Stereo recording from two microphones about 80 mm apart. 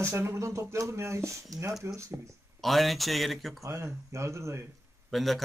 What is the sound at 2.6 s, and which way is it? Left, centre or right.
Speech, centre.